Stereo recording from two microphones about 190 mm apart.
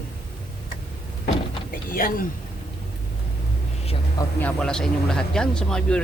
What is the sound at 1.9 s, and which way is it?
Speech, 50° left (ahead or behind).